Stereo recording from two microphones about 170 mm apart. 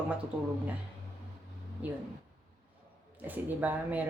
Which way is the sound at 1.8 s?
10° right (ahead or behind).